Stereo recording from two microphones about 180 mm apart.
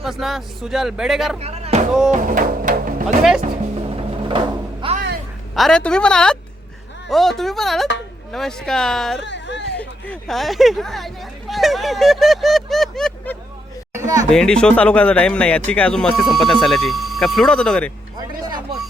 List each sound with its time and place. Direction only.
0.0 s speech: centre (ahead or behind)
1.4 s speech: 35° right (ahead or behind)
2.0 s music: 45° right (ahead or behind)
3.9 s music: 30° right (ahead or behind)
5.5 s speech: 5° left (ahead or behind)
9.2 s a sound: 80° left
9.7 s speech: 5° left (ahead or behind)
13.9 s a sound: 15° right (ahead or behind)
14.3 s speech: 5° left (ahead or behind)
18.2 s music: 20° right (ahead or behind)